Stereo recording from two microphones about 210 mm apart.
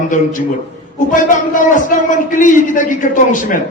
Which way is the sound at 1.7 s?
40° left (ahead or behind).